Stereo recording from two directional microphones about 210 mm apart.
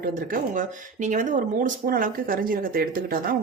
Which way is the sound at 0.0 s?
40° right (ahead or behind).